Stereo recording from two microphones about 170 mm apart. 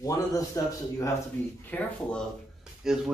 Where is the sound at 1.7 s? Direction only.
10° left (ahead or behind).